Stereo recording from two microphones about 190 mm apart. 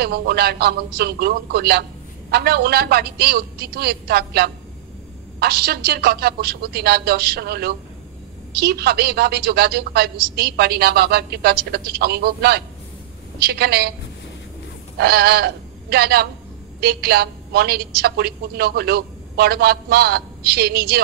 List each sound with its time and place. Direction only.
0.0 s a woman's voice: 55° right (ahead or behind)
15.0 s a woman's voice: 55° right (ahead or behind)